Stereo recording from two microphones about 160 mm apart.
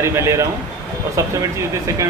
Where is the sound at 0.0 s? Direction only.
15° right (ahead or behind).